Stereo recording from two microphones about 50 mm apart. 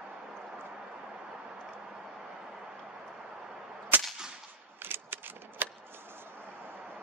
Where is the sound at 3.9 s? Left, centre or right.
Right.